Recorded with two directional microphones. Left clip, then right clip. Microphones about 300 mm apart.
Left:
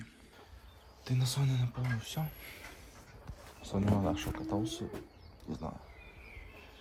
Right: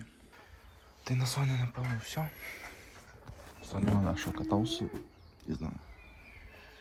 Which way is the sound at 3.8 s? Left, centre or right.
Centre.